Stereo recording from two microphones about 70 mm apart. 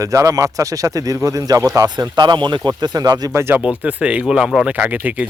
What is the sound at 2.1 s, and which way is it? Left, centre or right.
Speech, right.